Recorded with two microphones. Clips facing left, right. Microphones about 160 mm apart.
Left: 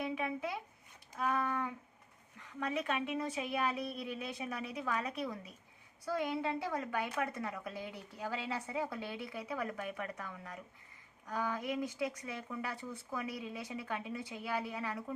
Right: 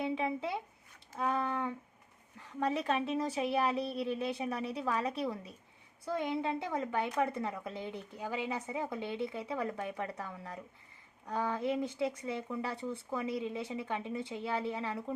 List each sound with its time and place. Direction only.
0.0 s a woman's voice: 25° right (ahead or behind)